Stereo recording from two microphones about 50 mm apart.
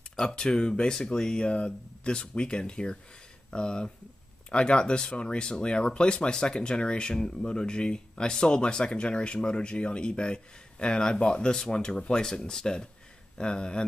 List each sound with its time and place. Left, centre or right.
0.1 s speech: centre